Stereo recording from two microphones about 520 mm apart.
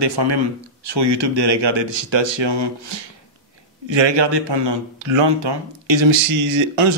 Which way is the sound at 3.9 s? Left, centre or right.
Right.